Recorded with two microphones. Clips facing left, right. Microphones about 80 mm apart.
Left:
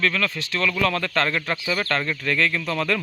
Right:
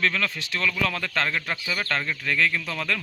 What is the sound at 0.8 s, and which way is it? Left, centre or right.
Speech, centre.